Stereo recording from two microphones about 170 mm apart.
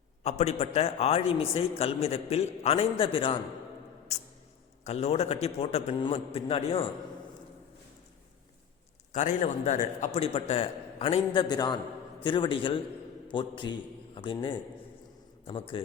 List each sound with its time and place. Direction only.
0.2 s a man's voice: 40° left (ahead or behind)
4.8 s a man's voice: 40° left (ahead or behind)
9.1 s a man's voice: 45° left (ahead or behind)
11.3 s a man's voice: 25° left (ahead or behind)